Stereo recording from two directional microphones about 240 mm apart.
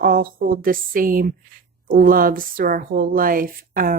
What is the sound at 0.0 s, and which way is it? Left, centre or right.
Speech, right.